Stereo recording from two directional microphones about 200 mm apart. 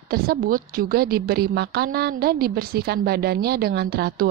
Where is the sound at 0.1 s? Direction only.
50° right (ahead or behind).